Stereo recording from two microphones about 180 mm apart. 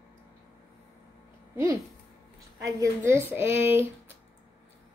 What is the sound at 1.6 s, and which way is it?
A woman's voice, 20° right (ahead or behind).